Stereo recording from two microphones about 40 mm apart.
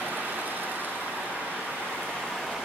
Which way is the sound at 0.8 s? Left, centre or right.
Left.